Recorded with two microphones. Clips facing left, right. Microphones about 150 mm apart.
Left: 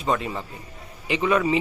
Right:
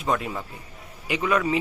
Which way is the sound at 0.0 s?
Centre (ahead or behind).